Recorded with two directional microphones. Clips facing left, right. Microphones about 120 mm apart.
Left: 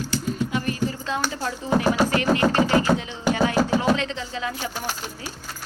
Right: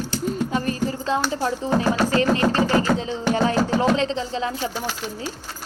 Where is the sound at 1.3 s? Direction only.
30° right (ahead or behind).